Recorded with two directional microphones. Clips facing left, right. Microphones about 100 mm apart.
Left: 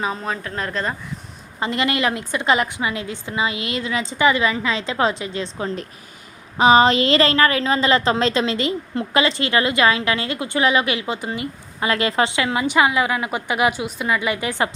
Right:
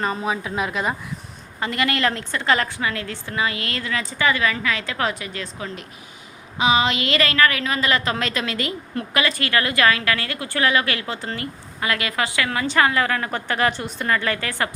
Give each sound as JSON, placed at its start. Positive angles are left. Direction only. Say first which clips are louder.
{"t": 0.0, "sound": "a woman's voice", "louder": "right 1 dB", "side_deg": 0}
{"t": 1.5, "sound": "a woman's voice", "louder": "left 2 dB", "side_deg": 20}